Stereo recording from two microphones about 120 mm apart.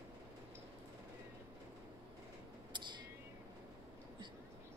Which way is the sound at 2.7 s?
40° right (ahead or behind).